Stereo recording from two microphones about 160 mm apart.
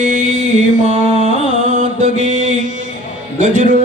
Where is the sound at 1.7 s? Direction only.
55° right (ahead or behind).